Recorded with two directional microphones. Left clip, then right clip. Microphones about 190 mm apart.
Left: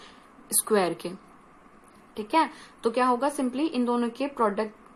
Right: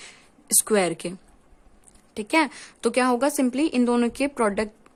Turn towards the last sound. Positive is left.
turn(degrees=-50)  # may be behind; listen again after turning